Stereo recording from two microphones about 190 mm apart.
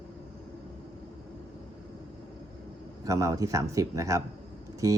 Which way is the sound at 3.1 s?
15° right (ahead or behind).